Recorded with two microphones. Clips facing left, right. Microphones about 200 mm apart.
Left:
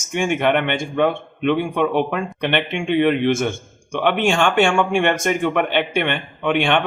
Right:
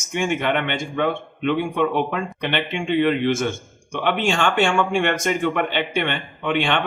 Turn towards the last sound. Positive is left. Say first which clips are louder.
# left 3 dB
turn(degrees=55)  # may be behind; listen again after turning